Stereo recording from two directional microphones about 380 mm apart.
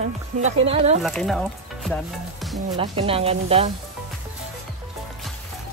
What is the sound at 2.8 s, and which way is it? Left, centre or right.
Speech, centre.